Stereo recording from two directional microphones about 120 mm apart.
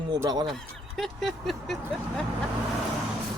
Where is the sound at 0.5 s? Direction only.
5° left (ahead or behind).